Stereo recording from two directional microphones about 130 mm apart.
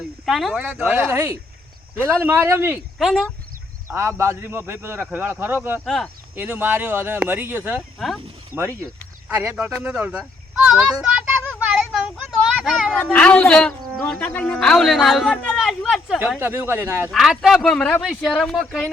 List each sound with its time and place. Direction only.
0.3 s speech: centre (ahead or behind)
0.6 s speech: 10° right (ahead or behind)
3.0 s speech: centre (ahead or behind)
3.8 s a man's voice: 20° right (ahead or behind)
5.8 s speech: centre (ahead or behind)
6.3 s speech: 15° right (ahead or behind)
7.8 s speech: centre (ahead or behind)
8.5 s a man's voice: 20° right (ahead or behind)
9.6 s child singing: 5° right (ahead or behind)
12.6 s speech: centre (ahead or behind)
13.0 s speech: 10° left (ahead or behind)
16.4 s a man's voice: 20° right (ahead or behind)
17.1 s speech: centre (ahead or behind)
18.0 s speech: centre (ahead or behind)